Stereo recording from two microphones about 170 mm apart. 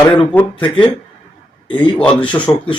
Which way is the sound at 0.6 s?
30° left (ahead or behind).